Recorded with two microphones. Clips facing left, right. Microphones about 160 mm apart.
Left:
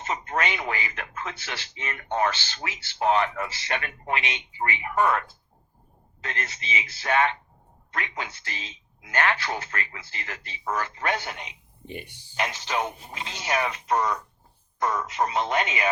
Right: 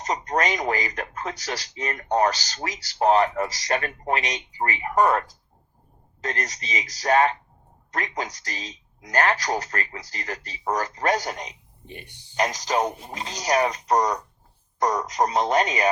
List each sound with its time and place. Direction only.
0.0 s speech: 40° right (ahead or behind)